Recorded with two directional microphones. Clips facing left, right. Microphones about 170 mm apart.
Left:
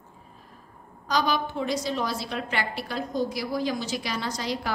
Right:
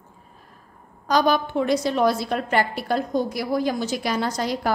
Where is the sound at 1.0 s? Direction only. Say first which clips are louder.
Right 6 dB; 50° right (ahead or behind).